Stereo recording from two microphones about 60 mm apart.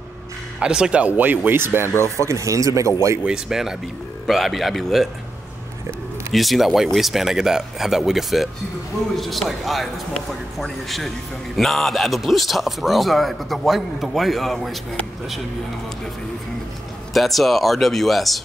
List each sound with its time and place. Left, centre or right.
0.6 s speech: centre
1.0 s speech: right
2.1 s speech: right
3.3 s a man's voice: centre
6.3 s a man's voice: centre
17.1 s a man's voice: centre